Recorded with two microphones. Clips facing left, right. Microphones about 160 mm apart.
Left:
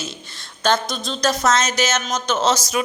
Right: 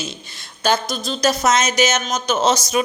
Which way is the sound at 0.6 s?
5° right (ahead or behind).